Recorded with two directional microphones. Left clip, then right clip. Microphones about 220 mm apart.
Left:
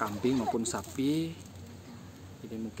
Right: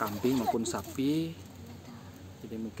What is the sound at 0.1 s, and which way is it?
Speech, 45° right (ahead or behind).